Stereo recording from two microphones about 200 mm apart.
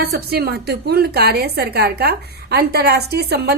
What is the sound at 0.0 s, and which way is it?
A woman's voice, 50° right (ahead or behind).